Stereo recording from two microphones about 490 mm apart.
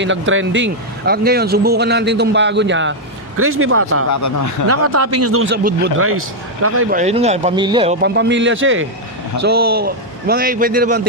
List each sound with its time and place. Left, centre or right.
0.0 s a man's voice: right
4.1 s speech: left
4.7 s a man's voice: right
7.0 s speech: centre